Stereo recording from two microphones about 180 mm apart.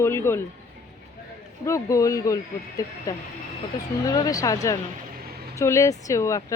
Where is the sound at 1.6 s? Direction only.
15° left (ahead or behind).